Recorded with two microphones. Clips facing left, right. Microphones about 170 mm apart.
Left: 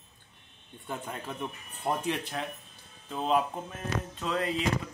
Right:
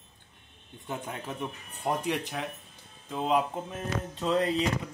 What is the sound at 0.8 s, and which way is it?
Speech, 10° right (ahead or behind).